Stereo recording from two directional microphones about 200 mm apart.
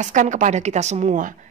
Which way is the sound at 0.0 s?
40° right (ahead or behind).